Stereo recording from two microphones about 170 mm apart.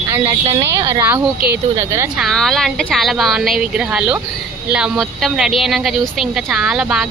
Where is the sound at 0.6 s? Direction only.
20° right (ahead or behind).